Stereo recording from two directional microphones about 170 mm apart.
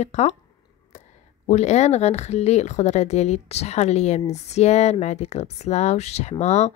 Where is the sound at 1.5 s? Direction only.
40° left (ahead or behind).